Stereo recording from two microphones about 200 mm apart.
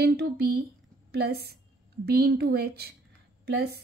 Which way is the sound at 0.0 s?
55° right (ahead or behind).